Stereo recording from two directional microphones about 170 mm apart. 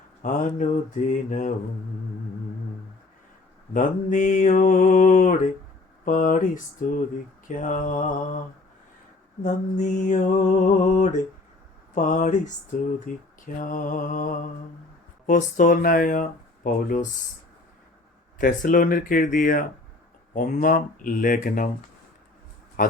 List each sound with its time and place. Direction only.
0.2 s speech: 50° left (ahead or behind)
3.8 s speech: 50° left (ahead or behind)
9.4 s speech: 45° left (ahead or behind)
18.3 s speech: 55° left (ahead or behind)
22.8 s speech: 50° left (ahead or behind)